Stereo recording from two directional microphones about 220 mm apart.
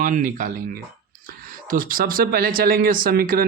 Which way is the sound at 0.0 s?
35° right (ahead or behind).